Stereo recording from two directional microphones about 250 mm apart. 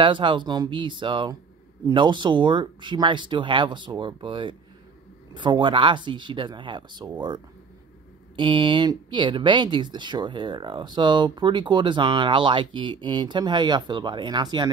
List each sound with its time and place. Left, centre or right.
0.0 s speech: centre